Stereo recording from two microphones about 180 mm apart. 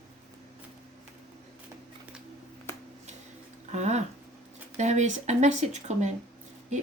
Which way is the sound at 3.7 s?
40° right (ahead or behind).